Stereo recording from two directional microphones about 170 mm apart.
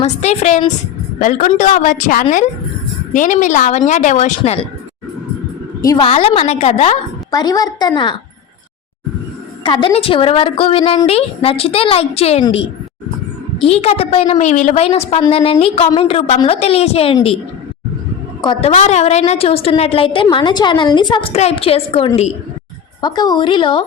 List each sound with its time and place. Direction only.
0.0 s a woman's voice: 40° left (ahead or behind)
5.8 s a woman's voice: 20° left (ahead or behind)
6.1 s a woman's voice: 35° left (ahead or behind)
7.3 s a woman's voice: 20° left (ahead or behind)
9.6 s a woman's voice: 30° left (ahead or behind); by 14.8 s 45° left (ahead or behind)
14.8 s a woman's voice: 35° left (ahead or behind)
18.4 s a woman's voice: 40° left (ahead or behind)
23.0 s a woman's voice: 25° left (ahead or behind)